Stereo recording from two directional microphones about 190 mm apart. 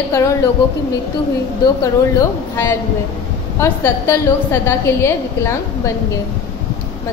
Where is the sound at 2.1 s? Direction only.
15° left (ahead or behind).